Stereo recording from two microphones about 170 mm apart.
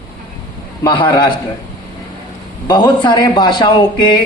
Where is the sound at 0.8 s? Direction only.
25° left (ahead or behind).